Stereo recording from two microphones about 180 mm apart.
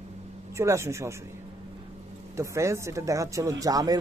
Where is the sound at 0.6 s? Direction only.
15° right (ahead or behind).